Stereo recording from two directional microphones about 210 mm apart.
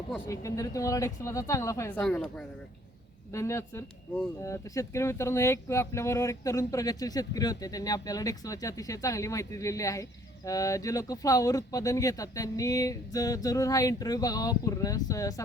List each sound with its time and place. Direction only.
0.3 s speech: 15° left (ahead or behind)